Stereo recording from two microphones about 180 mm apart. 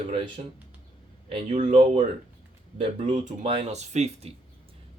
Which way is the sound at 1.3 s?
40° right (ahead or behind).